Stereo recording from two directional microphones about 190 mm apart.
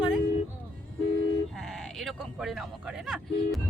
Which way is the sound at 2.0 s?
Centre (ahead or behind).